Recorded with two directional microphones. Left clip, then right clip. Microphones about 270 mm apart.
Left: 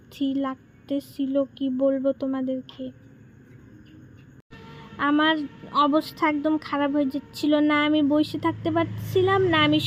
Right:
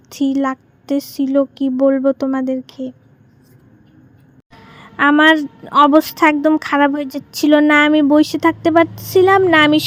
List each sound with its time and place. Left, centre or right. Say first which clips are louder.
0.1 s a woman's voice: right 10 dB; right
4.8 s a woman's voice: right 11 dB; right